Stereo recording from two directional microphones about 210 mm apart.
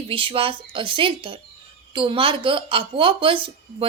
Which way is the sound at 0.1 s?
25° right (ahead or behind).